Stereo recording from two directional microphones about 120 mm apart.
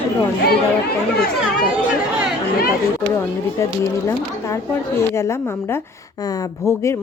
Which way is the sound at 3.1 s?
25° left (ahead or behind).